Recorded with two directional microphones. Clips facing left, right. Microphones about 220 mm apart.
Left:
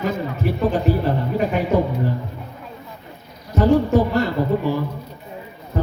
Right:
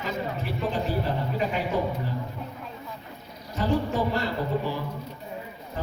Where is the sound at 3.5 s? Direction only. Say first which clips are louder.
Left 10 dB; 45° left (ahead or behind).